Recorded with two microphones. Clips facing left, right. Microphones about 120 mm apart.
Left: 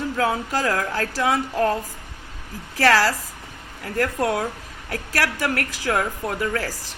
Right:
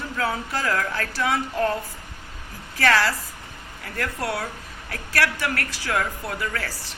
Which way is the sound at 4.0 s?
45° left (ahead or behind).